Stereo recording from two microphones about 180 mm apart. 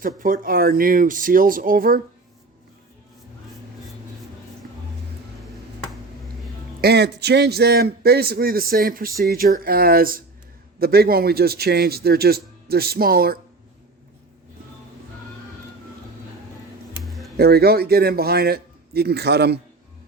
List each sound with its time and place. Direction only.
0.2 s speech: 50° right (ahead or behind)
6.8 s speech: 65° right (ahead or behind)
16.9 s music: centre (ahead or behind)
17.3 s speech: 60° right (ahead or behind)